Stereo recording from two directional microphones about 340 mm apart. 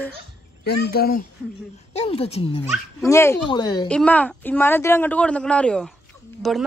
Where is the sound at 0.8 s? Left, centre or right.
Left.